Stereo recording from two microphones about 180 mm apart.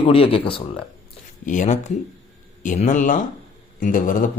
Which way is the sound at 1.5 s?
40° left (ahead or behind).